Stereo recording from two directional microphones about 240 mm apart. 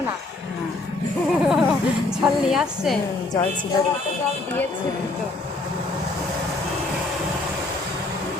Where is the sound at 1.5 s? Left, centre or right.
Centre.